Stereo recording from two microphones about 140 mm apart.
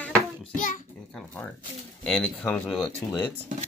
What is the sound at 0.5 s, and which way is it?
Child singing, 70° left (ahead or behind).